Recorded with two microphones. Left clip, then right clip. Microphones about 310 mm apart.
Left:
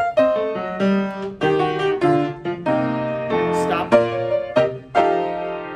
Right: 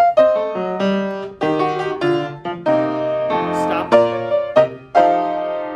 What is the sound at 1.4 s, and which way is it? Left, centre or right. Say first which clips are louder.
Music: even; centre.